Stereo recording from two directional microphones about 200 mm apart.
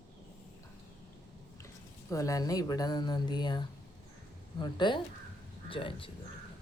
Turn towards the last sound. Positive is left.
turn(degrees=25)  # may be behind; listen again after turning